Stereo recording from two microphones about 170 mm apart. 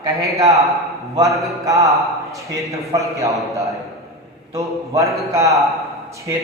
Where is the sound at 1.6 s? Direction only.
20° right (ahead or behind).